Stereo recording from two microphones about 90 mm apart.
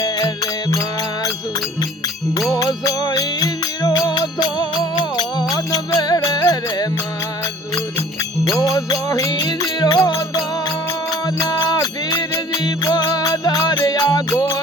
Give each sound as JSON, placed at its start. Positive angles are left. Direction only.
{"t": 2.6, "sound": "music", "side_deg": 45}
{"t": 8.4, "sound": "music", "side_deg": 35}
{"t": 11.3, "sound": "music", "side_deg": 50}